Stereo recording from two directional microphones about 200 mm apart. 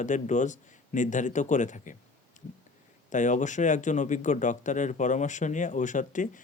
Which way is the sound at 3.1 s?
40° left (ahead or behind).